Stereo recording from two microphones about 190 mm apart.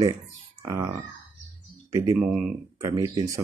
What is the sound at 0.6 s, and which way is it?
Speech, 15° right (ahead or behind).